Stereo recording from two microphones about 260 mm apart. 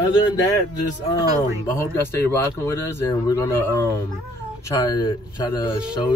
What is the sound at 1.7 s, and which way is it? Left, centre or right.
Speech, centre.